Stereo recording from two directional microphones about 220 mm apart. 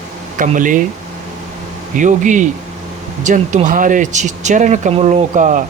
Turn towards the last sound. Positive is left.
turn(degrees=-35)  # may be behind; listen again after turning